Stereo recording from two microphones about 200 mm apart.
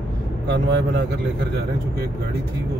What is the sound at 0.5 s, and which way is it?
Speech, 60° right (ahead or behind).